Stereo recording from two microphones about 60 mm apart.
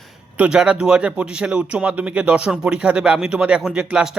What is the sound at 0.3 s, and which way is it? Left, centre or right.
A man's voice, centre.